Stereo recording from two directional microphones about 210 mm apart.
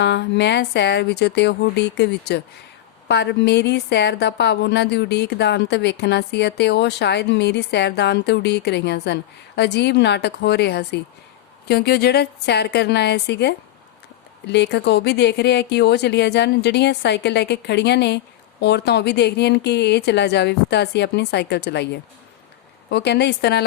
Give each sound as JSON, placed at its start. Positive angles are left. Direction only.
{"t": 0.0, "sound": "a woman's voice", "side_deg": 55}